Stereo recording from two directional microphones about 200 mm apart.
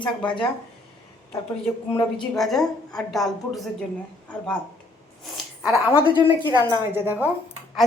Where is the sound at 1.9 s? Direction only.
Centre (ahead or behind).